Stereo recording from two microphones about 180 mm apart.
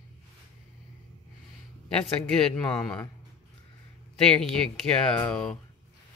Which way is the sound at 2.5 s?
5° left (ahead or behind).